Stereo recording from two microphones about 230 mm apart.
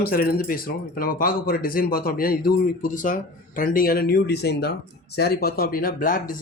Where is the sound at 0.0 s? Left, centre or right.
Left.